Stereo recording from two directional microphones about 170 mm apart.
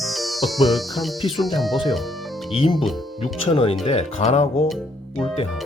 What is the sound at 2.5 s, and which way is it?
Speech, 35° left (ahead or behind).